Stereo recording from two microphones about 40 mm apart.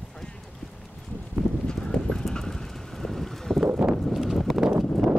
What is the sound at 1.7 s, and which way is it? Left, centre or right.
Clip-clop, left.